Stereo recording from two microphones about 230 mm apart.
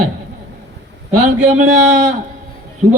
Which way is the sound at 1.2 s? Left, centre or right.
Right.